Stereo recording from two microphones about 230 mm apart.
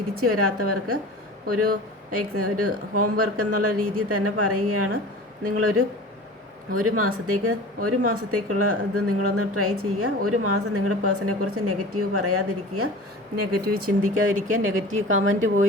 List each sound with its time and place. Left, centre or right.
0.2 s a woman's voice: right
13.3 s a woman's voice: right